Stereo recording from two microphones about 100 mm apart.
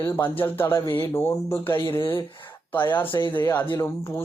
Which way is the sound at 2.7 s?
20° left (ahead or behind).